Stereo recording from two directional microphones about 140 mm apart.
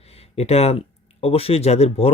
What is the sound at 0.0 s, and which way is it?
Speech, 45° left (ahead or behind).